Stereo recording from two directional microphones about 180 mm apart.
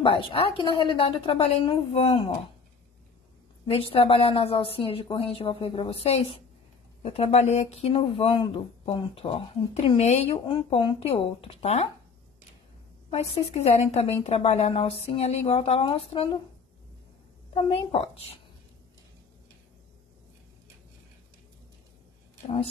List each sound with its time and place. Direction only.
0.0 s a woman's voice: 30° left (ahead or behind)
3.6 s a woman's voice: 30° left (ahead or behind)
13.1 s a woman's voice: 35° left (ahead or behind)
17.6 s a woman's voice: 35° left (ahead or behind)